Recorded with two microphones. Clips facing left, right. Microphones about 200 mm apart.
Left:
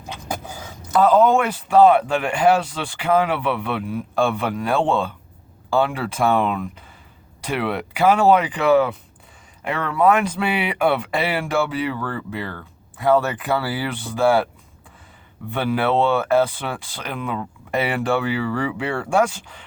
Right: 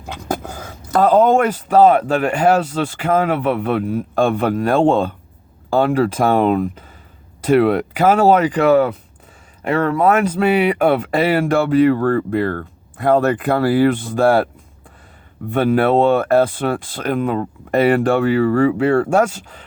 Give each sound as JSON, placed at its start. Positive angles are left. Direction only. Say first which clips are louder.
{"t": 0.3, "sound": "speech", "louder": "right 7 dB", "side_deg": -55}
{"t": 15.4, "sound": "speech", "louder": "right 6 dB", "side_deg": -45}